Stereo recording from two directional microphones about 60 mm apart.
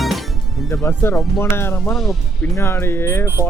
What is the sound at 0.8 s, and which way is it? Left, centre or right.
Speech, left.